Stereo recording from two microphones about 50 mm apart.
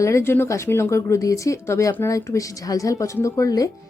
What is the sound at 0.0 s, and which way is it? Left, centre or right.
Speech, left.